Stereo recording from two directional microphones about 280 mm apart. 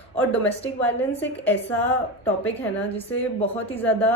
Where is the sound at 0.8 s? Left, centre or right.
Centre.